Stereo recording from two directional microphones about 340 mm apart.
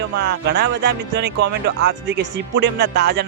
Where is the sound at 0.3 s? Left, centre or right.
Right.